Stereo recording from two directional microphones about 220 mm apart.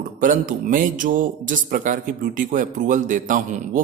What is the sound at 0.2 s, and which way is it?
A man's voice, 35° right (ahead or behind).